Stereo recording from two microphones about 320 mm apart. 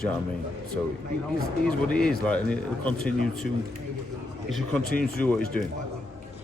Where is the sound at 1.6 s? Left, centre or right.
Centre.